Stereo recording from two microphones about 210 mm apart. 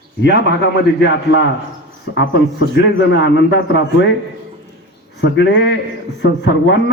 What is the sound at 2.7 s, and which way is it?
A man's voice, 55° left (ahead or behind).